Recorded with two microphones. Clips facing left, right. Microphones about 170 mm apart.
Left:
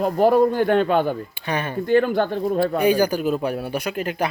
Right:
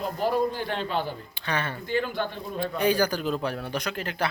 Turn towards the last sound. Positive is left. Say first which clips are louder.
# left 5 dB
turn(degrees=15)  # may be behind; listen again after turning